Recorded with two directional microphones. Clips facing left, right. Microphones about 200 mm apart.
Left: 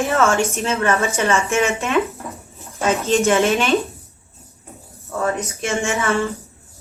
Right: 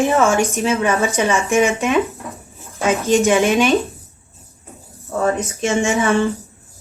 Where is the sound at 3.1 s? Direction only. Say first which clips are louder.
Right 2 dB; 15° right (ahead or behind).